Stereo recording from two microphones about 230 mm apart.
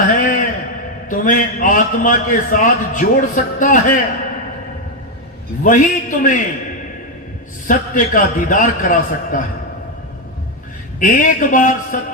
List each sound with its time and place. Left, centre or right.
0.2 s a sound: left
1.1 s a man's voice: left
5.6 s a man's voice: left
7.7 s a man's voice: left
11.0 s a man's voice: left